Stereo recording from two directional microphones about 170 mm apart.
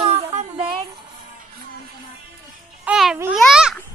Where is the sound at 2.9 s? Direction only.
Centre (ahead or behind).